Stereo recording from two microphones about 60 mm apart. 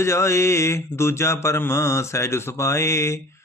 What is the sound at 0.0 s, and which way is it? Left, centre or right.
Speech, left.